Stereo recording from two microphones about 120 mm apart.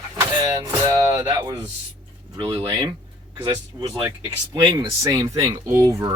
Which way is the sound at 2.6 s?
35° right (ahead or behind).